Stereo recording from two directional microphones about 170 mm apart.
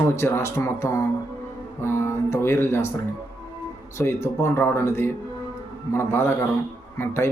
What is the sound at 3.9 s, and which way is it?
Speech, 15° left (ahead or behind).